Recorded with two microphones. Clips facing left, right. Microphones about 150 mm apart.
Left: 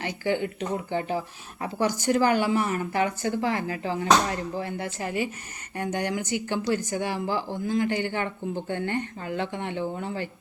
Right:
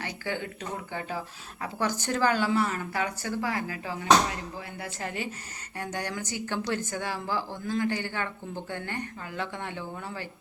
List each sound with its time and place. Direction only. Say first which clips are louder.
0.0 s a woman's voice: left 7 dB; 20° left (ahead or behind)
1.8 s a woman's voice: left 4 dB; 15° left (ahead or behind)
4.9 s a woman's voice: left 3 dB; 15° left (ahead or behind)